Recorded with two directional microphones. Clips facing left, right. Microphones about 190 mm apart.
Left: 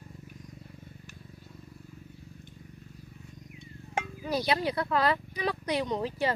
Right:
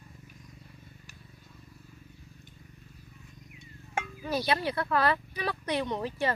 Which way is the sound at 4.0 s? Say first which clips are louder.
Left 1 dB; 15° left (ahead or behind).